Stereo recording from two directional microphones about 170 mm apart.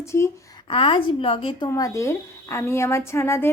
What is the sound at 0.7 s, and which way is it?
A woman's voice, 30° left (ahead or behind).